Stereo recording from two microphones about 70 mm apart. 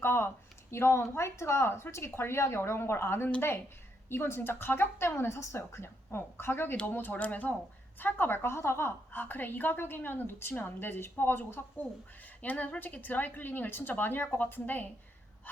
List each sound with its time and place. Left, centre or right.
0.0 s a woman's voice: left